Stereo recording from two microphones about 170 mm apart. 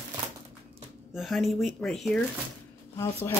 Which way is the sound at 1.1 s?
Centre (ahead or behind).